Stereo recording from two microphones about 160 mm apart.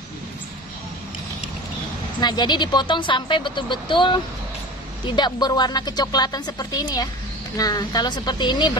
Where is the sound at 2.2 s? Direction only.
25° left (ahead or behind).